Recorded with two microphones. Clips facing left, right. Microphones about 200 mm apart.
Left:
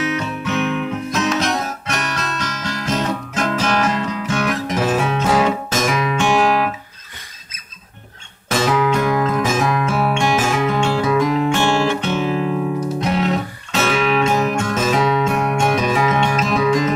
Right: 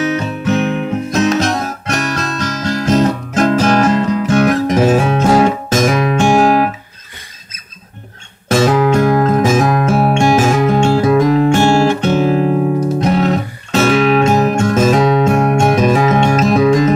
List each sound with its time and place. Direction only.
0.0 s guitar: 40° right (ahead or behind)
8.5 s music: 45° right (ahead or behind)